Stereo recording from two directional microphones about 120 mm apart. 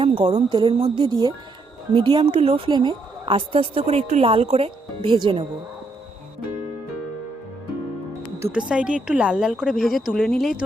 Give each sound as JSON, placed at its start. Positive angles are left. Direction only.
{"t": 0.0, "sound": "speech", "side_deg": -50}
{"t": 0.5, "sound": "a woman's voice", "side_deg": -45}
{"t": 2.2, "sound": "a woman's voice", "side_deg": -55}
{"t": 4.3, "sound": "a woman's voice", "side_deg": -55}
{"t": 5.1, "sound": "a woman's voice", "side_deg": -40}
{"t": 8.5, "sound": "speech", "side_deg": -10}